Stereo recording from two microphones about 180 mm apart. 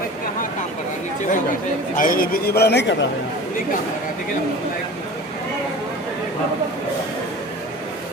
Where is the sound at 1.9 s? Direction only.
50° left (ahead or behind); by 3.0 s 75° left (ahead or behind).